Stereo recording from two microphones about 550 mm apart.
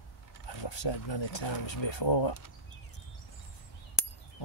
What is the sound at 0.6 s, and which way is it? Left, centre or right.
Speech, left.